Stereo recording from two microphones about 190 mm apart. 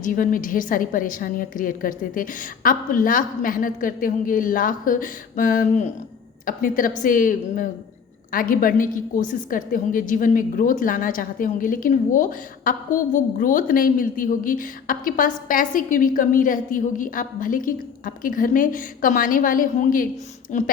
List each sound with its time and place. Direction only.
0.0 s a woman's voice: 45° left (ahead or behind)